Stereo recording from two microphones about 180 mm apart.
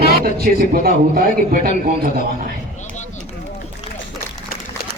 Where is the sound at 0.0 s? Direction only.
55° right (ahead or behind).